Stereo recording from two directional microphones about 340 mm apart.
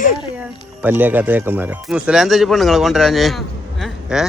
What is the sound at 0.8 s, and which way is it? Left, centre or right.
Speech, centre.